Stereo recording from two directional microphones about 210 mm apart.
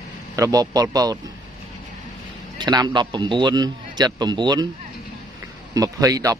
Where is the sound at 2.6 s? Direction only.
20° right (ahead or behind).